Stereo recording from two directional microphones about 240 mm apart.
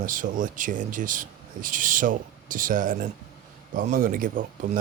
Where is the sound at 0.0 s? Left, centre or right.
Right.